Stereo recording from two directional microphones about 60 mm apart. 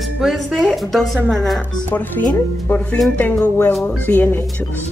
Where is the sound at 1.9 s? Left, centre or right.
Left.